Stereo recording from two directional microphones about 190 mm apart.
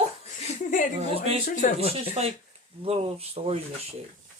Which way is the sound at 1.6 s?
40° left (ahead or behind).